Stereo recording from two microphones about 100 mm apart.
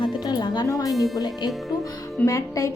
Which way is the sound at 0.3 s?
45° left (ahead or behind).